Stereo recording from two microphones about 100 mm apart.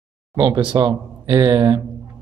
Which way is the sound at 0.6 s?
45° right (ahead or behind).